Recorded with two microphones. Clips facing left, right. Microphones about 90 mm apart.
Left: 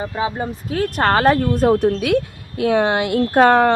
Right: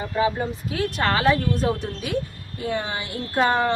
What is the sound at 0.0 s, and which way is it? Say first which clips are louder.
Speech: left 1 dB; 25° left (ahead or behind).